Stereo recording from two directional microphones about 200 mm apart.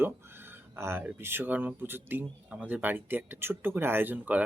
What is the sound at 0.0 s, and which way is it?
Speech, 10° right (ahead or behind).